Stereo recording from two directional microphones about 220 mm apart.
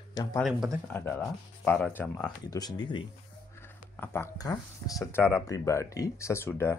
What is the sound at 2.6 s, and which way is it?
Speech, 20° left (ahead or behind).